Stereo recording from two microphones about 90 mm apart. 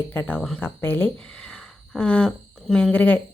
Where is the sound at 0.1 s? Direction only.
25° left (ahead or behind); by 2.9 s 5° left (ahead or behind).